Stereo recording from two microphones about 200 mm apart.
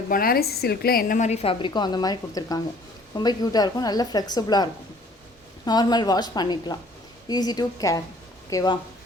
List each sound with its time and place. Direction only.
0.1 s a woman's voice: 45° left (ahead or behind); by 8.8 s 20° left (ahead or behind)